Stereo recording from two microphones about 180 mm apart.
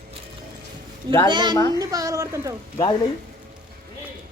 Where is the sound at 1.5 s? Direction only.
20° left (ahead or behind).